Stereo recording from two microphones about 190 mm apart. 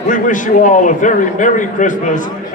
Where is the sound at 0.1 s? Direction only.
45° left (ahead or behind).